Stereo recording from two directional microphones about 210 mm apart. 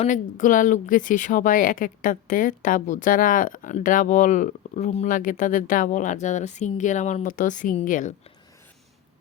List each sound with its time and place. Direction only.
0.0 s speech: 35° left (ahead or behind)